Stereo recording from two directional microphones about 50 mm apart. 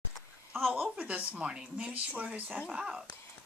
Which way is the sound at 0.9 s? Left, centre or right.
Right.